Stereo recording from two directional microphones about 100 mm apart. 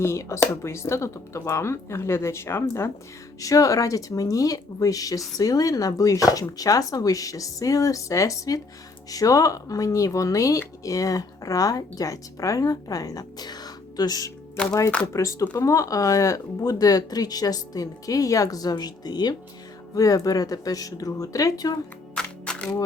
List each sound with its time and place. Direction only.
0.0 s speech: 30° left (ahead or behind)
22.1 s music: 10° left (ahead or behind)